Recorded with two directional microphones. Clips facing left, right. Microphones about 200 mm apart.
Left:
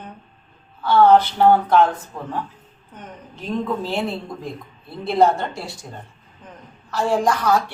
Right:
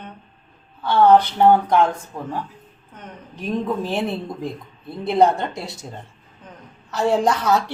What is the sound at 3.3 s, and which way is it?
Speech, 15° right (ahead or behind).